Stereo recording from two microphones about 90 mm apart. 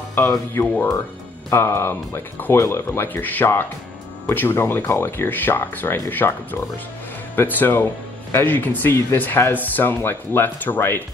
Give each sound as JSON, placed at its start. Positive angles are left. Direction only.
{"t": 0.2, "sound": "speech", "side_deg": 30}